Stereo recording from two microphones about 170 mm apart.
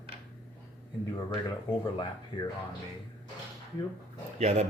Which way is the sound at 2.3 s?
30° left (ahead or behind).